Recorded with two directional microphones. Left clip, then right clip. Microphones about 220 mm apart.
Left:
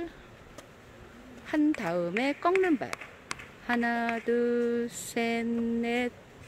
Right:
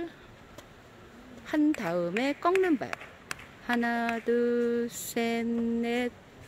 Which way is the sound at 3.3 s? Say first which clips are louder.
Even; 55° right (ahead or behind).